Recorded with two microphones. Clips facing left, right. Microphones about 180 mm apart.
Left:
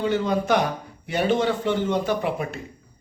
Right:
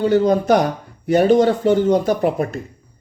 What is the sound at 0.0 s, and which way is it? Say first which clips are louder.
A woman's voice: right 8 dB; 40° right (ahead or behind).